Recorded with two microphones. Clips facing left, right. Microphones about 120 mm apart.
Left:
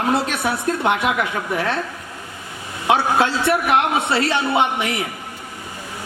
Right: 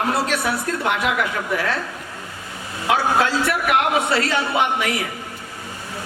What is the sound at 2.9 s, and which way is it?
A man's voice, 25° left (ahead or behind).